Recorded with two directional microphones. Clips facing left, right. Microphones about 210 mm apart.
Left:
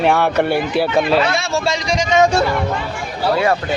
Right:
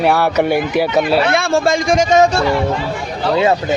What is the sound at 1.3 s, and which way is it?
Speech, 55° right (ahead or behind).